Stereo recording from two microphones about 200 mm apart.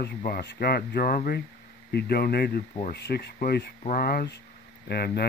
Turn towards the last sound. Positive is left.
turn(degrees=50)  # may be behind; listen again after turning